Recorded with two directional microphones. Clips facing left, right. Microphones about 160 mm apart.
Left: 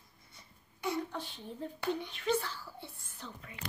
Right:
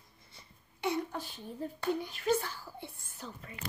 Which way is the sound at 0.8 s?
10° right (ahead or behind).